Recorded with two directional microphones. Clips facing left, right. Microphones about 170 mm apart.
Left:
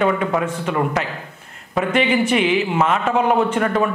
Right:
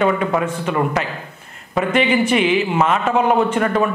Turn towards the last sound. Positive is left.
turn(degrees=-10)  # may be behind; listen again after turning